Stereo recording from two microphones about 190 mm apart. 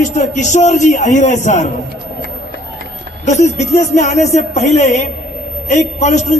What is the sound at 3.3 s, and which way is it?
A man's voice, 35° left (ahead or behind).